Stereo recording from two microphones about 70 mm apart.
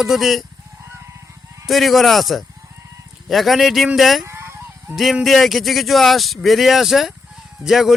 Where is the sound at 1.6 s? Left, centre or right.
Centre.